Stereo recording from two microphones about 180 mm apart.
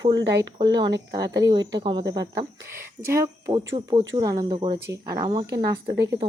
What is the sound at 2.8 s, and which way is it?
Speech, 15° right (ahead or behind).